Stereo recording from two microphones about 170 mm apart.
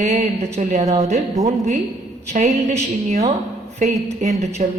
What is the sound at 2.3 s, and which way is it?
Speech, 45° right (ahead or behind).